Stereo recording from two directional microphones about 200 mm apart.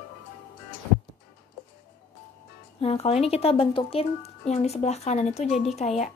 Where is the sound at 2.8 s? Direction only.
30° left (ahead or behind).